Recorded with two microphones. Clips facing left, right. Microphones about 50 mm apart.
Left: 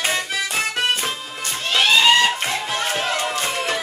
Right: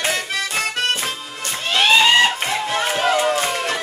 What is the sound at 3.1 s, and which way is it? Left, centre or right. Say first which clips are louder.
Music: right 5 dB; centre.